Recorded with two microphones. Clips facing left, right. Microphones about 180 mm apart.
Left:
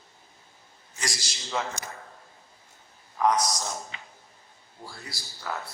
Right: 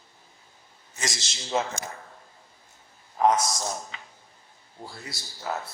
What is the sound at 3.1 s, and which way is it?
Speech, 25° right (ahead or behind).